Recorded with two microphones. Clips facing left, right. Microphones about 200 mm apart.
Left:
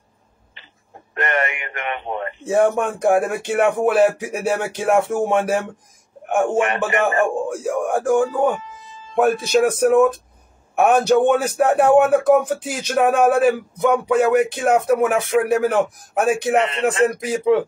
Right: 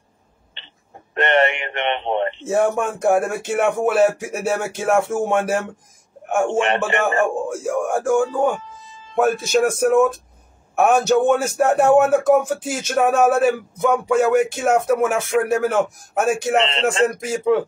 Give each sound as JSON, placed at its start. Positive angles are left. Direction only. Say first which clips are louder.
{"t": 1.2, "sound": "a sound", "louder": "right 5 dB", "side_deg": -30}
{"t": 2.4, "sound": "speech", "louder": "left 4 dB", "side_deg": 0}
{"t": 6.9, "sound": "a man's voice", "louder": "left 1 dB", "side_deg": -30}
{"t": 7.5, "sound": "speech", "louder": "even", "side_deg": 0}
{"t": 16.5, "sound": "a man's voice", "louder": "left 1 dB", "side_deg": -30}
{"t": 17.5, "sound": "speech", "louder": "left 1 dB", "side_deg": 0}